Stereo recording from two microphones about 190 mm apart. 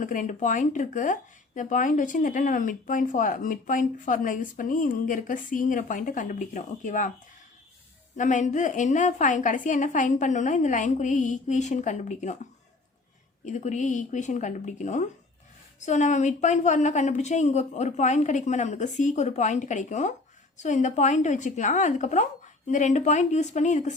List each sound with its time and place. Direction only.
0.0 s speech: 45° left (ahead or behind)
8.1 s a woman's voice: 40° left (ahead or behind)